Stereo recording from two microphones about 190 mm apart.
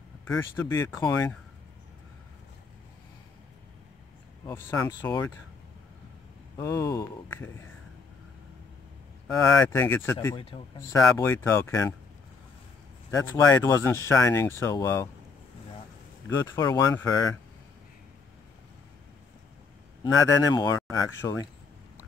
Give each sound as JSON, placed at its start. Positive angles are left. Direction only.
{"t": 0.3, "sound": "speech", "side_deg": 15}
{"t": 4.5, "sound": "speech", "side_deg": 15}
{"t": 6.6, "sound": "speech", "side_deg": 15}
{"t": 9.3, "sound": "speech", "side_deg": 15}
{"t": 13.5, "sound": "speech", "side_deg": 15}
{"t": 16.3, "sound": "speech", "side_deg": 15}
{"t": 20.0, "sound": "speech", "side_deg": 20}